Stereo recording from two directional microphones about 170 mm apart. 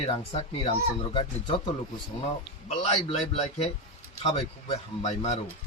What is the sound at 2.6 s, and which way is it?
Speech, 40° left (ahead or behind).